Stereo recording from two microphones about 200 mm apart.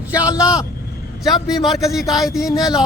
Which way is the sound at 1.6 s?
Centre (ahead or behind).